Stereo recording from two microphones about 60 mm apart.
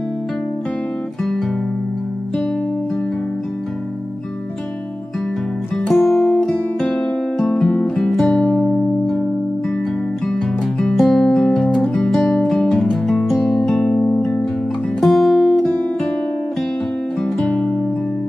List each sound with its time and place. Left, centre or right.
5.9 s music: centre
10.2 s music: centre
15.0 s music: centre
17.2 s music: centre